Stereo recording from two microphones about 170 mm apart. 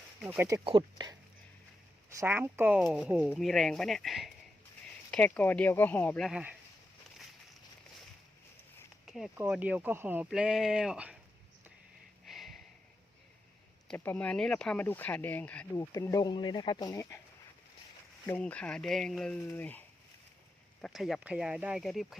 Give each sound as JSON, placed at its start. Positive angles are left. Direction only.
{"t": 0.2, "sound": "speech", "side_deg": -10}
{"t": 0.6, "sound": "speech", "side_deg": -30}
{"t": 2.0, "sound": "speech", "side_deg": -15}
{"t": 6.2, "sound": "speech", "side_deg": -5}
{"t": 9.0, "sound": "a sound", "side_deg": 0}
{"t": 9.4, "sound": "speech", "side_deg": -10}
{"t": 12.2, "sound": "snort", "side_deg": 0}
{"t": 13.8, "sound": "speech", "side_deg": 10}
{"t": 18.3, "sound": "speech", "side_deg": 10}
{"t": 20.8, "sound": "speech", "side_deg": 0}